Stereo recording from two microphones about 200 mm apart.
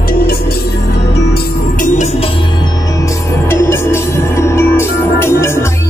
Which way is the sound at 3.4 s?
10° left (ahead or behind).